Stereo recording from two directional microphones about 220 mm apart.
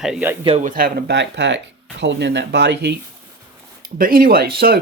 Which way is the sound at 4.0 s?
40° right (ahead or behind).